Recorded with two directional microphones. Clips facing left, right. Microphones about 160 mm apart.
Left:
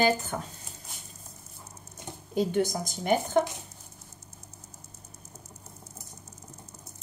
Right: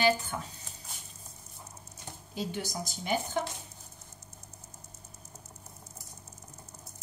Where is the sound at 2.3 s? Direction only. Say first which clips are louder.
Left 9 dB; 55° left (ahead or behind).